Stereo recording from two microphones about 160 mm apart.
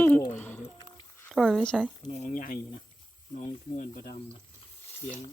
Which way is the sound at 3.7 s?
55° left (ahead or behind).